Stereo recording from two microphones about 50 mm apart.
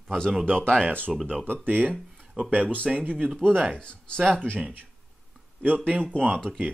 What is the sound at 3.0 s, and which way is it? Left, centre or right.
Speech, right.